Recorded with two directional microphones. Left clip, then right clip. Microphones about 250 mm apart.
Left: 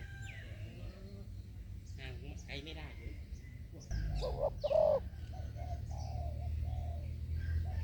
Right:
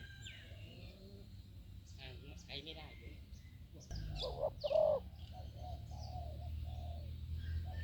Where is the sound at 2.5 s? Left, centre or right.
Left.